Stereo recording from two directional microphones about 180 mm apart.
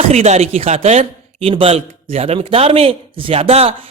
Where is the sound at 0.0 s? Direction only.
35° right (ahead or behind).